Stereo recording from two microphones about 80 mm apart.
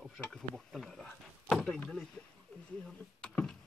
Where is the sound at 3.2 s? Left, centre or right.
Centre.